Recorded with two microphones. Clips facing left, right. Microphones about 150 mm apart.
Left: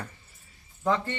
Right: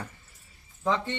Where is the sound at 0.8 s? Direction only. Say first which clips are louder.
Left 1 dB; 5° left (ahead or behind).